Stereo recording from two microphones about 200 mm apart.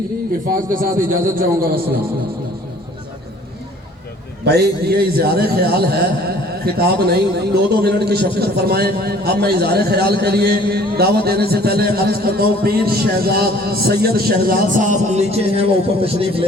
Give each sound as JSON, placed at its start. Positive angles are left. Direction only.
{"t": 0.7, "sound": "a man's voice", "side_deg": -45}
{"t": 4.4, "sound": "a man's voice", "side_deg": -55}